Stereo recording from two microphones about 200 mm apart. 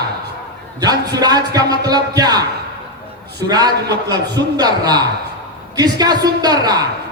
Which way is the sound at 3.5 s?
20° right (ahead or behind).